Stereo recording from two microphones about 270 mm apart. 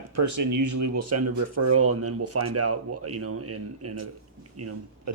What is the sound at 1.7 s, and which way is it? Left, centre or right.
Speech, right.